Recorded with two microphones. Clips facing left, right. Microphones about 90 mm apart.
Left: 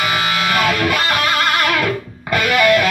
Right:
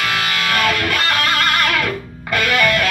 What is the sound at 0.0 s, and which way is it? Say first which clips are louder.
Music: left 2 dB; 10° left (ahead or behind).